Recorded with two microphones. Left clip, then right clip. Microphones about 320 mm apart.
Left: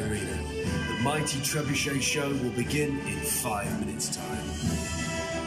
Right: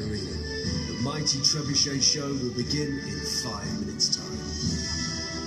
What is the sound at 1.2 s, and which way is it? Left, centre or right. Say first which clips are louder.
Speech: right 4 dB; left.